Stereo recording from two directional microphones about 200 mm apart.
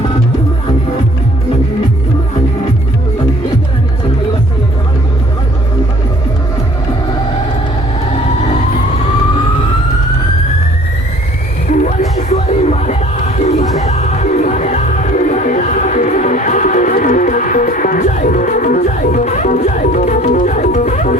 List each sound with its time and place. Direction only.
11.7 s music: 40° left (ahead or behind)